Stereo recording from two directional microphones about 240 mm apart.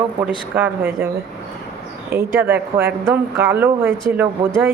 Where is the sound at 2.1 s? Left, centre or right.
Centre.